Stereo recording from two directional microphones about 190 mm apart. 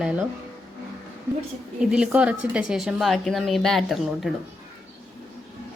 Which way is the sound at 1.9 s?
5° right (ahead or behind).